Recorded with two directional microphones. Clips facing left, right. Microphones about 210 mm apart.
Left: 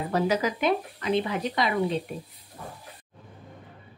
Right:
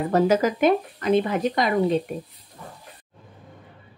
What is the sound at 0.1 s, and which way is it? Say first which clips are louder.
Speech: right 6 dB; 50° right (ahead or behind).